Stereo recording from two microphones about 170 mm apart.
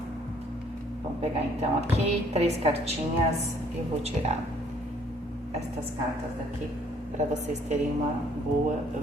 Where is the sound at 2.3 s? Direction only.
40° right (ahead or behind).